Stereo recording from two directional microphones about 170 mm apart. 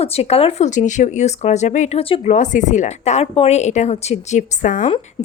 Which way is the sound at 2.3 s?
45° left (ahead or behind).